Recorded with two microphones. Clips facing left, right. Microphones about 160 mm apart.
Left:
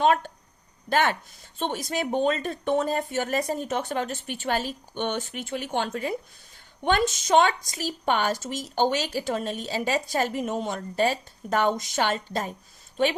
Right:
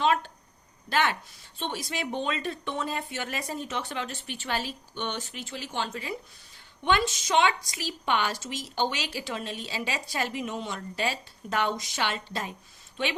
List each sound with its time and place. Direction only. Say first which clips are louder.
0.0 s a woman's voice: left 4 dB; 50° left (ahead or behind)